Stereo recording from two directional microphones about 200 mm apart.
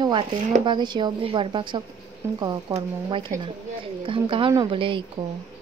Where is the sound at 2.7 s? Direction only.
25° right (ahead or behind).